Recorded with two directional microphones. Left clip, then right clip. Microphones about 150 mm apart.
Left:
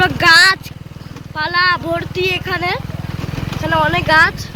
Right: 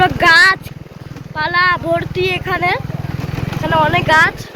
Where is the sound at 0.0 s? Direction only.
15° left (ahead or behind).